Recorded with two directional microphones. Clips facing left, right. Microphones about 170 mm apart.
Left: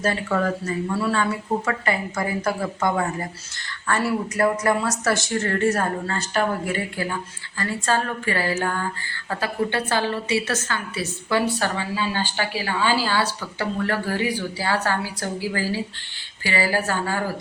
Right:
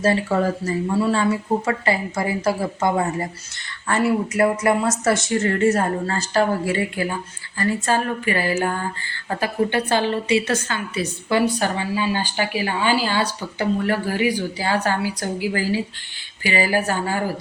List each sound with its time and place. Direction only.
0.0 s speech: 25° right (ahead or behind)
6.1 s speech: 35° right (ahead or behind)
6.7 s a woman's voice: 20° right (ahead or behind)